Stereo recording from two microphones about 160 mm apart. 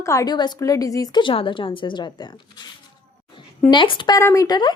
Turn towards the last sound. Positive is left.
turn(degrees=25)  # may be behind; listen again after turning